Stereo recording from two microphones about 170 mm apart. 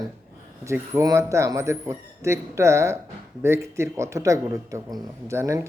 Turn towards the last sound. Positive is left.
turn(degrees=-15)  # may be behind; listen again after turning